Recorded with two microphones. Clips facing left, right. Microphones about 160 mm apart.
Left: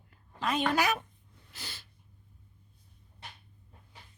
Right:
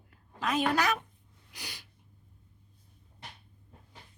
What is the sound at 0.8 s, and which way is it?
Speech, 10° left (ahead or behind).